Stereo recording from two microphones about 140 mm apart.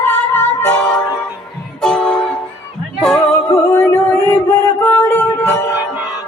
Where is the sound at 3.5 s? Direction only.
15° left (ahead or behind).